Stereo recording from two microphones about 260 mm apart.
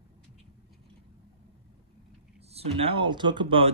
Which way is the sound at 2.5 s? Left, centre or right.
Right.